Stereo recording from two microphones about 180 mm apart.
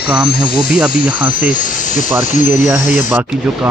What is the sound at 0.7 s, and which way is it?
Speech, 5° right (ahead or behind).